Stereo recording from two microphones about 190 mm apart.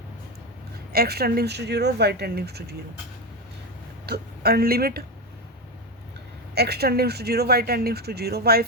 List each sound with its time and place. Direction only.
0.9 s speech: 55° right (ahead or behind)
4.0 s speech: 55° right (ahead or behind)
6.5 s speech: 60° right (ahead or behind)